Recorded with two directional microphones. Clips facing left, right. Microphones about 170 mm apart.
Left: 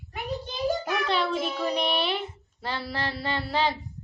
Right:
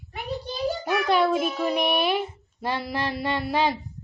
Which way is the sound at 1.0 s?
10° right (ahead or behind).